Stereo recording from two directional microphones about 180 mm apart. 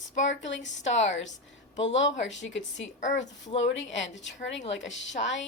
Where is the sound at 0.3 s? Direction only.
90° left.